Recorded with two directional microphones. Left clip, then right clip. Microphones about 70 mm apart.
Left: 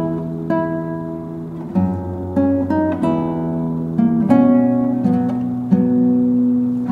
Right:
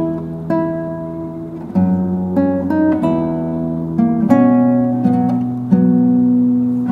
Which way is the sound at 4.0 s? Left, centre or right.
Centre.